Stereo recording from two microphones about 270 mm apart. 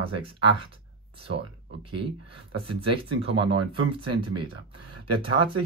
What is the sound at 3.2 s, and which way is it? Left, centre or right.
Speech, centre.